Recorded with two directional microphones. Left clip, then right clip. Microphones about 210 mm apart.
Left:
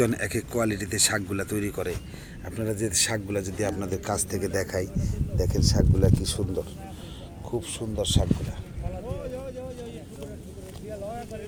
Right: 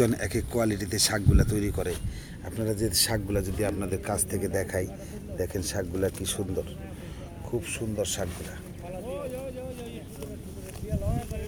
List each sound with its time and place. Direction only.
0.0 s speech: 5° right (ahead or behind)
7.5 s speech: 5° left (ahead or behind)
9.0 s a sound: 60° left (ahead or behind)